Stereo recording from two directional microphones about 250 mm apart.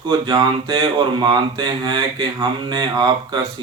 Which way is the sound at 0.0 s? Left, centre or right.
Centre.